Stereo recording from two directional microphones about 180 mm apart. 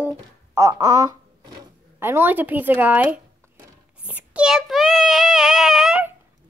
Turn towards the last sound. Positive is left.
turn(degrees=-5)  # may be behind; listen again after turning